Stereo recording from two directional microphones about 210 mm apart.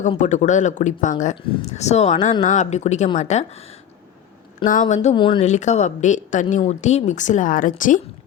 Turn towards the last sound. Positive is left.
turn(degrees=40)  # may be behind; listen again after turning